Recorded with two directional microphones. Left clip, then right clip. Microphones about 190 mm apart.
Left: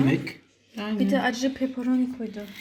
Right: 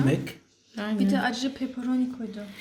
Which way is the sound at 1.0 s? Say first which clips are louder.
Left 3 dB; 15° left (ahead or behind).